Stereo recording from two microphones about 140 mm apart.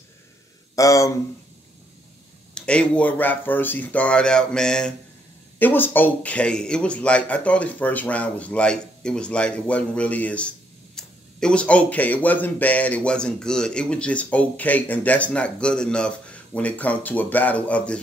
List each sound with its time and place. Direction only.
0.7 s speech: 25° left (ahead or behind)
2.5 s speech: 5° left (ahead or behind)